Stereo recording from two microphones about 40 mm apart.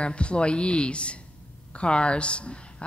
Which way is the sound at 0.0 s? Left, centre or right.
Left.